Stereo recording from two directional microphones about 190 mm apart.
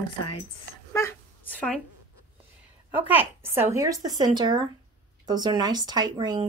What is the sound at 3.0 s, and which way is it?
Speech, 10° right (ahead or behind).